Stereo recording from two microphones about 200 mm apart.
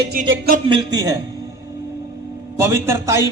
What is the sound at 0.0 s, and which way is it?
Music, 55° right (ahead or behind).